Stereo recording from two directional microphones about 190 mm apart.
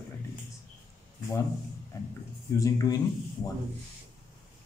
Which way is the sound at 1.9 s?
15° left (ahead or behind).